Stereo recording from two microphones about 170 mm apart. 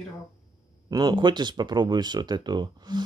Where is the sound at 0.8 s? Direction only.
25° right (ahead or behind).